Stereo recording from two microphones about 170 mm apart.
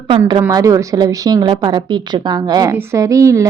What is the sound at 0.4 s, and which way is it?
A woman's voice, 20° right (ahead or behind).